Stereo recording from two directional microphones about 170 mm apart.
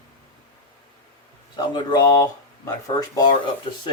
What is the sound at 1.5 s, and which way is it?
Speech, 25° left (ahead or behind).